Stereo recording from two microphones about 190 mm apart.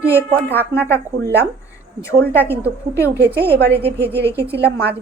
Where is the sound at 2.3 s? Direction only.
10° left (ahead or behind).